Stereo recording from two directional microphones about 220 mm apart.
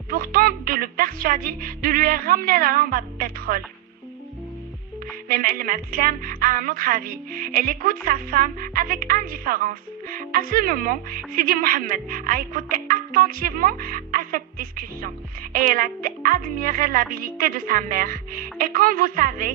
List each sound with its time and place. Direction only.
0.1 s a woman's voice: 40° right (ahead or behind)
5.3 s a woman's voice: 40° right (ahead or behind)